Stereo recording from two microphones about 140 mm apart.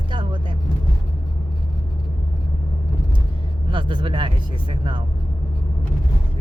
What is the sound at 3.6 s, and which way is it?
Speech, 35° right (ahead or behind).